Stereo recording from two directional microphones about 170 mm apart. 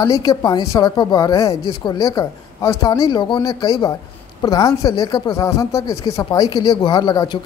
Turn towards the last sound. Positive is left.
turn(degrees=25)  # may be behind; listen again after turning